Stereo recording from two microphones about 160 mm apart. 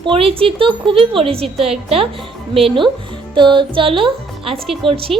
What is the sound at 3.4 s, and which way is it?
A child's voice, 30° right (ahead or behind).